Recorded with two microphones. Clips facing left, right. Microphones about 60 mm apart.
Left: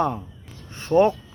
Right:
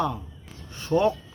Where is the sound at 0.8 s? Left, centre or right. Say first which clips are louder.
Left 4 dB; left.